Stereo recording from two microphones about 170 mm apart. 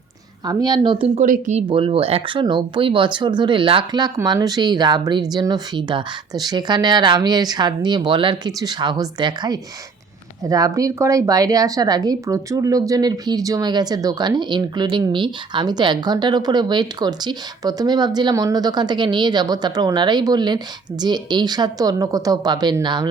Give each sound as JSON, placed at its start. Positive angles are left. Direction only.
{"t": 0.4, "sound": "speech", "side_deg": -25}
{"t": 1.2, "sound": "speech", "side_deg": -45}
{"t": 1.6, "sound": "speech", "side_deg": -30}